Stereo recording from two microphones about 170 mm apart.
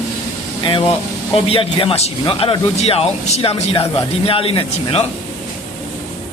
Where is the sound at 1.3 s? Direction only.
35° left (ahead or behind).